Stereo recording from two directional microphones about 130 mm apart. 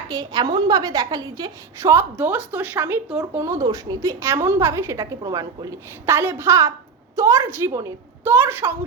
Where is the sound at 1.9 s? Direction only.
15° right (ahead or behind).